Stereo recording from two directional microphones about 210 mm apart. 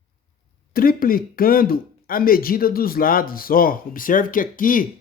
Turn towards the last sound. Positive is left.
turn(degrees=40)  # may be behind; listen again after turning